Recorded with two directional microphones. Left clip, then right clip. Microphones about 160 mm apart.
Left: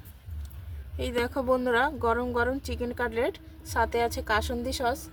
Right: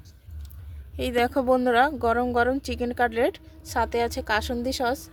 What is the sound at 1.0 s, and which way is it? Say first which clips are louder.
Speech: right 5 dB; 50° right (ahead or behind).